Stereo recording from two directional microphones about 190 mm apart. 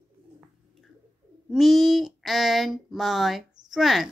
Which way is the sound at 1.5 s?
Centre (ahead or behind).